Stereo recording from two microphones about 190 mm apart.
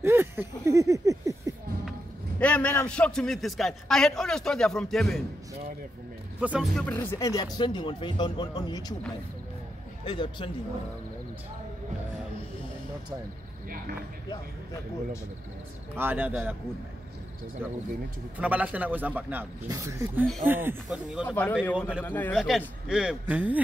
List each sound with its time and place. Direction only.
0.0 s a sound: 10° right (ahead or behind)
2.4 s a man's voice: 5° left (ahead or behind)
6.4 s speech: 5° right (ahead or behind); by 8.9 s 20° left (ahead or behind)
10.0 s speech: 25° left (ahead or behind)
15.9 s speech: 10° right (ahead or behind)
18.4 s speech: 10° right (ahead or behind)
21.3 s speech: 10° left (ahead or behind)
22.3 s a man's voice: 5° right (ahead or behind)